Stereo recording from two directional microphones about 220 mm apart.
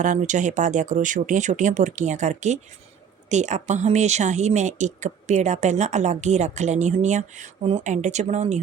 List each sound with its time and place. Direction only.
0.0 s speech: 35° right (ahead or behind)